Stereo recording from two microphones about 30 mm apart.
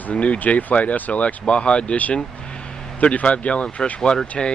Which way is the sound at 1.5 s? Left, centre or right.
Left.